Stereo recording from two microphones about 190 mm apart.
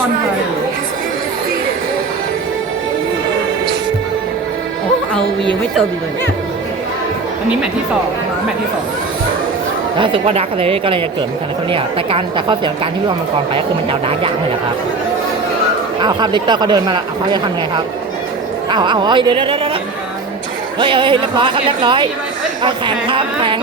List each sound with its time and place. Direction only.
10.0 s speech: 30° right (ahead or behind)
16.0 s speech: 25° right (ahead or behind)
20.7 s speech: 25° right (ahead or behind)